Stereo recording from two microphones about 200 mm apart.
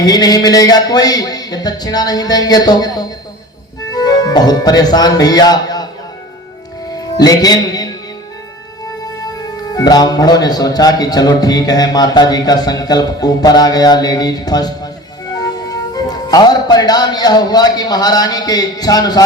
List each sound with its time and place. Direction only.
0.0 s speech: 20° left (ahead or behind)
6.9 s music: 20° left (ahead or behind)
9.3 s a man's voice: 20° left (ahead or behind)